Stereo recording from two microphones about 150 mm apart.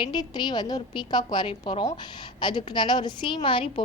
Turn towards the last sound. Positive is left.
turn(degrees=35)  # may be behind; listen again after turning